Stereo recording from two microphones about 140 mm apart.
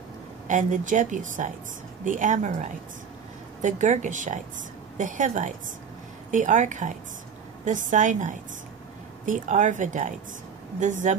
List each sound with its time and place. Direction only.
0.5 s a woman's voice: 65° right (ahead or behind)
3.6 s a woman's voice: 60° right (ahead or behind)